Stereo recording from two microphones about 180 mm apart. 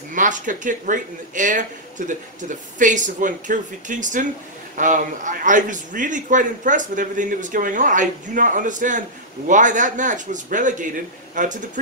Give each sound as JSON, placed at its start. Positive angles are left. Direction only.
{"t": 0.1, "sound": "a man's voice", "side_deg": -45}